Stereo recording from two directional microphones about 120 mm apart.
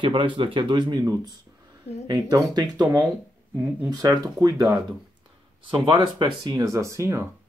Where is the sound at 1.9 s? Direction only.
60° left (ahead or behind).